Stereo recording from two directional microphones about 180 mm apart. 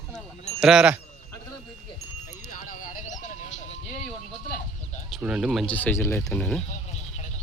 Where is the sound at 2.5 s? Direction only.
50° left (ahead or behind).